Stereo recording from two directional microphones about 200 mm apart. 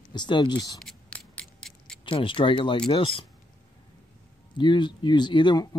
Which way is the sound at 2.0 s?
25° left (ahead or behind).